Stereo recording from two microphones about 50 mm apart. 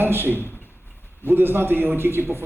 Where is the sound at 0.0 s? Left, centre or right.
Right.